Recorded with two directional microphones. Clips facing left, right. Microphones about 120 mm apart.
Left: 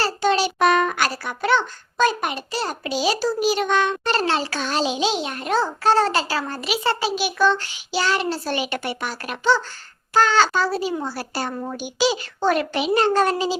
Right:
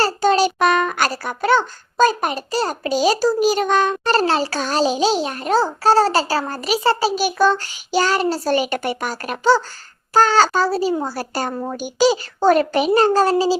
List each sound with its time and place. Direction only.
0.0 s a child's voice: 40° right (ahead or behind)